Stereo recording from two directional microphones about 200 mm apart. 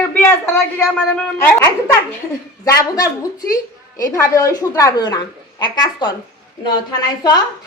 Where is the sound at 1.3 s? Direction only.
10° left (ahead or behind).